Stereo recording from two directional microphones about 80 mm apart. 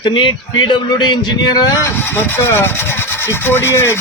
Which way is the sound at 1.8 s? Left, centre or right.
Left.